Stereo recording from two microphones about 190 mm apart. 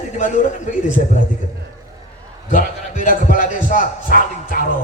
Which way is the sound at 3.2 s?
45° left (ahead or behind).